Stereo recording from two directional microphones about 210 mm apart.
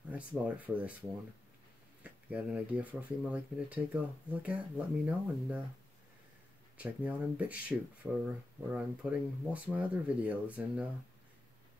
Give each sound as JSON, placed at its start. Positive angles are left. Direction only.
{"t": 0.1, "sound": "speech", "side_deg": -5}
{"t": 2.0, "sound": "speech", "side_deg": -5}
{"t": 6.8, "sound": "speech", "side_deg": -5}